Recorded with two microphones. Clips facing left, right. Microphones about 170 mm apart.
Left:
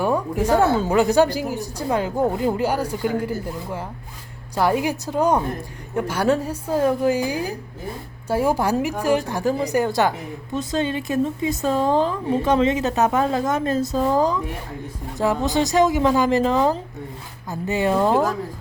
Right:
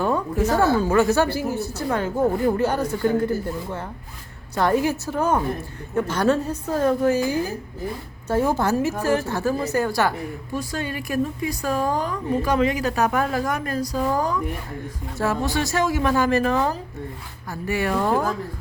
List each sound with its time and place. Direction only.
0.0 s a woman's voice: 15° left (ahead or behind)